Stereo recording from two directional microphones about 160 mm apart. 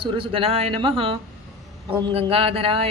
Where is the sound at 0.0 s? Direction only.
35° right (ahead or behind).